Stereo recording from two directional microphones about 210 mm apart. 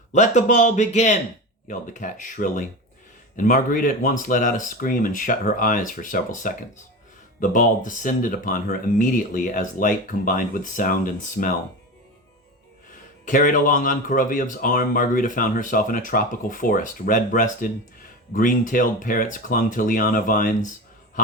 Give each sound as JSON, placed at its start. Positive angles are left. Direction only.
{"t": 0.1, "sound": "speech", "side_deg": 35}
{"t": 13.2, "sound": "speech", "side_deg": 40}